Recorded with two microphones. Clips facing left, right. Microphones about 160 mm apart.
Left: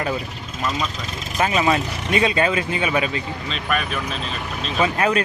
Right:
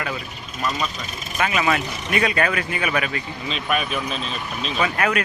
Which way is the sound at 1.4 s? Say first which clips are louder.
Left 2 dB; 30° left (ahead or behind).